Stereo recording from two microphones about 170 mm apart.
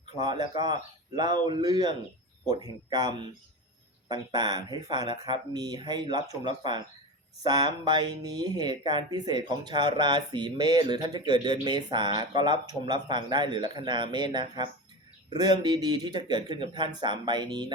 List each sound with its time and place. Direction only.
0.0 s speech: 25° right (ahead or behind)